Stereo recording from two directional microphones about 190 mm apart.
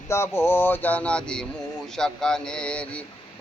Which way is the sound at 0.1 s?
10° left (ahead or behind).